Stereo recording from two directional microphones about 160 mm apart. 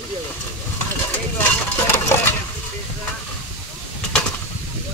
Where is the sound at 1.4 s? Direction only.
15° left (ahead or behind).